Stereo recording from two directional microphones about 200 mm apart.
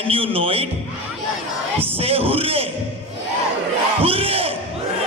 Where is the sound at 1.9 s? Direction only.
30° right (ahead or behind).